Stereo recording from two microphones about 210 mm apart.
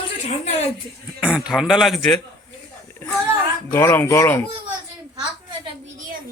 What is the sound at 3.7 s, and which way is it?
Speech, 10° left (ahead or behind).